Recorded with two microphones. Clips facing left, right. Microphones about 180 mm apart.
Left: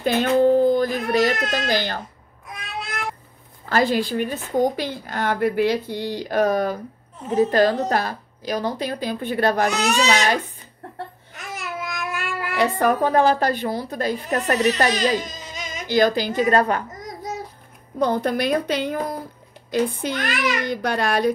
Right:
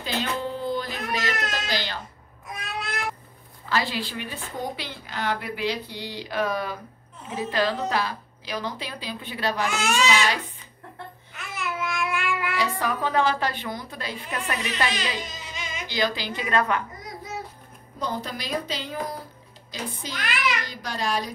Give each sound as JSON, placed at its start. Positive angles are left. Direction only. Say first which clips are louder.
{"t": 0.0, "sound": "baby cry", "louder": "left 12 dB", "side_deg": 50}
{"t": 3.6, "sound": "a woman's voice", "louder": "left 7 dB", "side_deg": 50}
{"t": 11.3, "sound": "babbling", "louder": "left 1 dB", "side_deg": 40}
{"t": 12.5, "sound": "a woman's voice", "louder": "left 12 dB", "side_deg": 55}
{"t": 17.9, "sound": "a woman's voice", "louder": "left 10 dB", "side_deg": 55}